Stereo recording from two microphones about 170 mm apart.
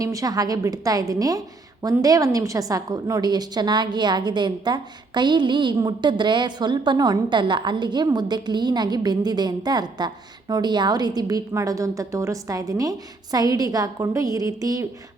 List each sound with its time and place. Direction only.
0.0 s a woman's voice: 20° right (ahead or behind)